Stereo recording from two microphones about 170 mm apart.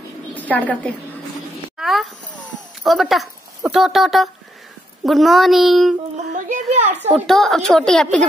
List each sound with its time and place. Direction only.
0.3 s a sound: 10° left (ahead or behind)
1.8 s a woman's voice: centre (ahead or behind)
6.3 s a child's voice: 45° right (ahead or behind)
7.2 s a woman's voice: centre (ahead or behind)